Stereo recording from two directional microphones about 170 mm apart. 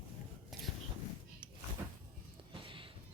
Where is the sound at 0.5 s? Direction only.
Centre (ahead or behind).